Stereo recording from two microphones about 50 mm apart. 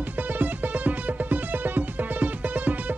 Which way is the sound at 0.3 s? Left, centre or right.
Right.